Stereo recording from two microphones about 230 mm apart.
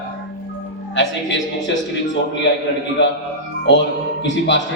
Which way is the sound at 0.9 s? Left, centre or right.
Left.